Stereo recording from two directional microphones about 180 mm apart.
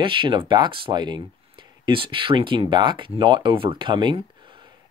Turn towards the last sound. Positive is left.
turn(degrees=-25)  # may be behind; listen again after turning